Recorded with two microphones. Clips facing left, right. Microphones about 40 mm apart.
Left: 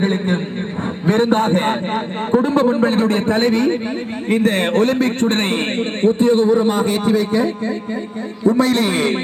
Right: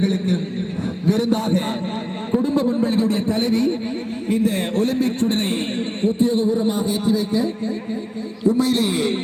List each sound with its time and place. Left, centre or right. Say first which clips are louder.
0.0 s a man's voice: left 2 dB; left